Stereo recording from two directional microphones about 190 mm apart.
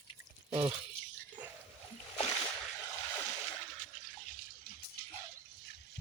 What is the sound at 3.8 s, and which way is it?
Water, 40° left (ahead or behind).